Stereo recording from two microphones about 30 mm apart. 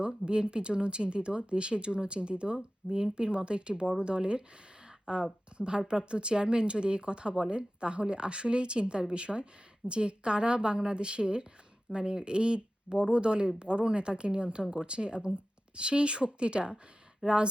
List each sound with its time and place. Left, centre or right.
0.3 s speech: right